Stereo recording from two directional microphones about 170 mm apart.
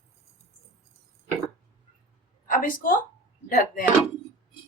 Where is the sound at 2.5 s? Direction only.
50° left (ahead or behind).